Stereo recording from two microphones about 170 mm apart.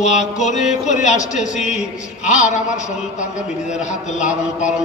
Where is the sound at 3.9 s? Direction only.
45° left (ahead or behind).